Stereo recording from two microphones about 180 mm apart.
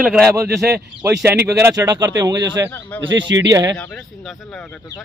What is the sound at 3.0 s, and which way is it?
Speech, 90° right.